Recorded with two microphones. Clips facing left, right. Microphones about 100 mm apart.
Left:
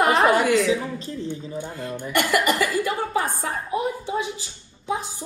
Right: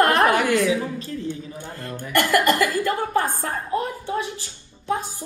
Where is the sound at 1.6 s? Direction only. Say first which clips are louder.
Left 3 dB; 15° left (ahead or behind).